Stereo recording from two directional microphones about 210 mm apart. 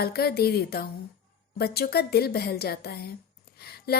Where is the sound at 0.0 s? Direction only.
50° left (ahead or behind).